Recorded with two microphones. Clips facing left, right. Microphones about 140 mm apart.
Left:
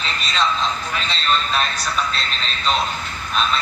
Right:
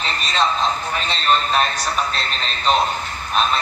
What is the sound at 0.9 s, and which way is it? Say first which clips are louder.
A man's voice: right 2 dB; 45° right (ahead or behind).